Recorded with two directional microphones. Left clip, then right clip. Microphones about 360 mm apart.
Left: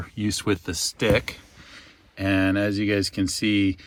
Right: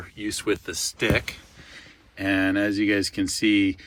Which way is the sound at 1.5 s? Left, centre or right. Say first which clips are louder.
Right 1 dB; centre.